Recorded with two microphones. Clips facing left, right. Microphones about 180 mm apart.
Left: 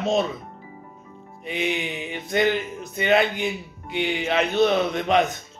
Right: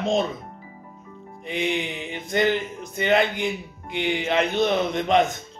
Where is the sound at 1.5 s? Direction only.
20° right (ahead or behind).